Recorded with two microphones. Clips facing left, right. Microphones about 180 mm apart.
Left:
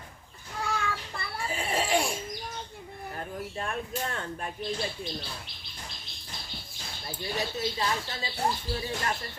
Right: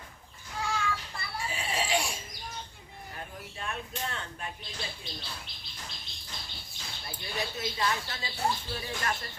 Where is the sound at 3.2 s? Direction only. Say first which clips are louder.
Left 6 dB; 45° left (ahead or behind).